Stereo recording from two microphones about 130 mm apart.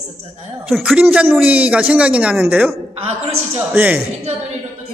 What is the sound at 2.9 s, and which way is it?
Speech, 50° right (ahead or behind).